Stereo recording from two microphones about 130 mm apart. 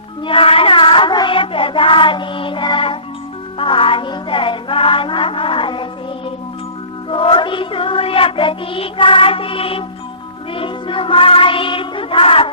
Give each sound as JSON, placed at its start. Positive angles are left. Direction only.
{"t": 0.3, "sound": "child singing", "side_deg": 45}
{"t": 3.6, "sound": "music", "side_deg": 45}
{"t": 7.1, "sound": "music", "side_deg": 40}
{"t": 10.5, "sound": "child singing", "side_deg": 40}